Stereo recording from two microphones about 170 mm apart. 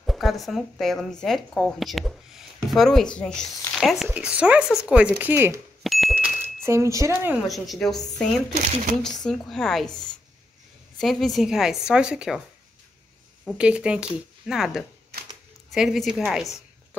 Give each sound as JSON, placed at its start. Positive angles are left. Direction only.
{"t": 0.0, "sound": "a woman's voice", "side_deg": 0}
{"t": 5.9, "sound": "bicycle bell", "side_deg": 0}
{"t": 6.1, "sound": "a sound", "side_deg": -15}
{"t": 7.4, "sound": "a woman's voice", "side_deg": 0}
{"t": 9.2, "sound": "a woman's voice", "side_deg": 5}
{"t": 11.0, "sound": "a woman's voice", "side_deg": 0}
{"t": 13.5, "sound": "a woman's voice", "side_deg": -5}